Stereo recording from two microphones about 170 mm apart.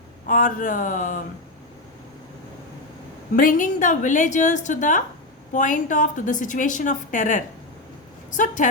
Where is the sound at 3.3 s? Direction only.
55° left (ahead or behind).